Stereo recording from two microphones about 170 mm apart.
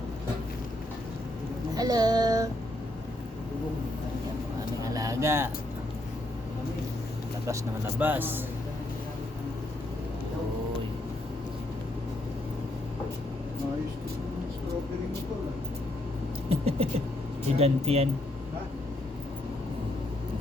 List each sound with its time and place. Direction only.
1.7 s child singing: 20° right (ahead or behind)
4.8 s vehicle: 20° right (ahead or behind)
7.4 s speech: 15° right (ahead or behind)
16.5 s speech: 35° right (ahead or behind)